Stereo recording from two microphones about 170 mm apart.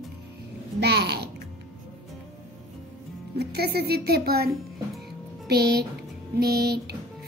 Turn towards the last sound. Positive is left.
turn(degrees=-70)  # may be behind; listen again after turning